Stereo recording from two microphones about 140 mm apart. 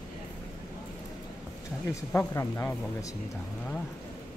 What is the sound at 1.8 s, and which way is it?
Speech, 20° left (ahead or behind).